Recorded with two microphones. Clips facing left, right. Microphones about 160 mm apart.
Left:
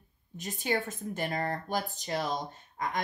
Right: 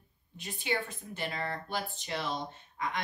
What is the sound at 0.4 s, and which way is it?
Speech, 45° left (ahead or behind).